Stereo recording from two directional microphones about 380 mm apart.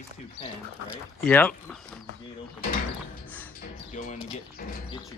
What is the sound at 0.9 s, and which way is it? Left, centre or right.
Speech, centre.